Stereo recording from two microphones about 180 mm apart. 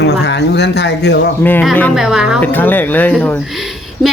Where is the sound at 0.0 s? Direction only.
75° left (ahead or behind).